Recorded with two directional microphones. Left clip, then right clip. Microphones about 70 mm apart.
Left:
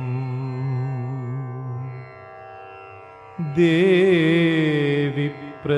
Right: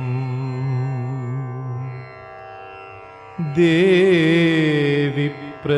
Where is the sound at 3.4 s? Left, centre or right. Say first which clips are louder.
Right 2 dB; right.